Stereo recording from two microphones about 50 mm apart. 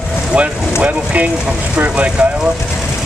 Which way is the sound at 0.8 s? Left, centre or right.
Right.